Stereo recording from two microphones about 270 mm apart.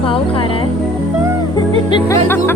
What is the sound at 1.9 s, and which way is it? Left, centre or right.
Music, centre.